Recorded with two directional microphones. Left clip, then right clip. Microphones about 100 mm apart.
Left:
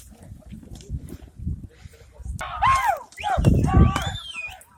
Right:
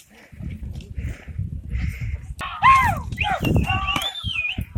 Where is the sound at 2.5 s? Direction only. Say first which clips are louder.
Right 5 dB; 50° left (ahead or behind).